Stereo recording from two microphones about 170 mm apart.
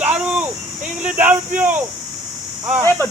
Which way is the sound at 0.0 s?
5° right (ahead or behind).